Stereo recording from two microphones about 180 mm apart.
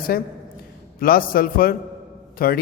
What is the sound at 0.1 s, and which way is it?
A man's voice, 60° left (ahead or behind).